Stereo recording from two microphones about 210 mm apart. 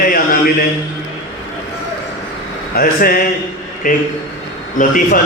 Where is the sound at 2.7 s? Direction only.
45° left (ahead or behind).